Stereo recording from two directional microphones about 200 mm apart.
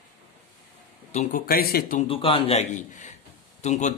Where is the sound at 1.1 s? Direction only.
45° left (ahead or behind).